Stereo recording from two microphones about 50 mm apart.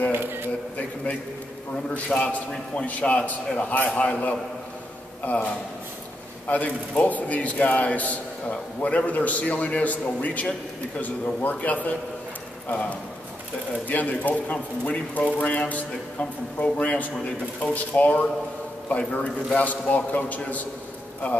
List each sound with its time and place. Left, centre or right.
0.1 s a sound: right
2.0 s a man's voice: left
5.2 s a man's voice: left
13.8 s a man's voice: left